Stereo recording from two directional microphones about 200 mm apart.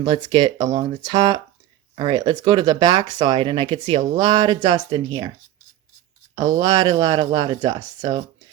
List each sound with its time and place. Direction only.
0.0 s speech: 20° right (ahead or behind)
6.3 s speech: 20° right (ahead or behind)